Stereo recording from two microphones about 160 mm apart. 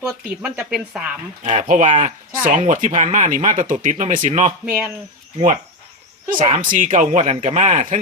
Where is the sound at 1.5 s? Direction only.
50° right (ahead or behind).